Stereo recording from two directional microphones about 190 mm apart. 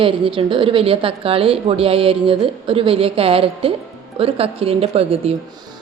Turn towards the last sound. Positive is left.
turn(degrees=-30)  # may be behind; listen again after turning